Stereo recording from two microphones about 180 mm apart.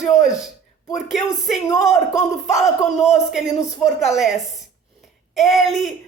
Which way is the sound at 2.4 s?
40° left (ahead or behind).